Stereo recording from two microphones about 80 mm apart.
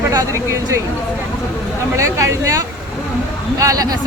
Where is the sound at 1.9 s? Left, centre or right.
Right.